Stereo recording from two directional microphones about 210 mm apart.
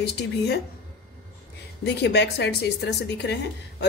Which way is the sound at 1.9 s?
55° left (ahead or behind).